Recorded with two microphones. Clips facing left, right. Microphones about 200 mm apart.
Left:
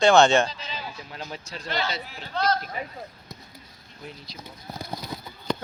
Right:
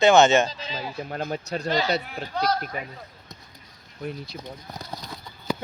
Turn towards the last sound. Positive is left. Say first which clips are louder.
# even
turn(degrees=-10)  # may be behind; listen again after turning